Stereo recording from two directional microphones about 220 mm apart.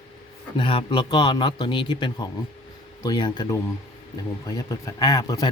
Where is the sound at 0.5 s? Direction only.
25° left (ahead or behind).